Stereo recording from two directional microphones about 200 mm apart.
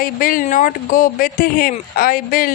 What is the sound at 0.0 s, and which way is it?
Speech, 45° left (ahead or behind).